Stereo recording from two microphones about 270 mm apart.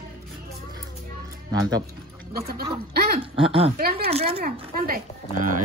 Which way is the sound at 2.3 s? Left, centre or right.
Right.